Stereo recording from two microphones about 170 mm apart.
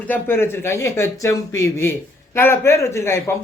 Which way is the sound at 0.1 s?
15° left (ahead or behind).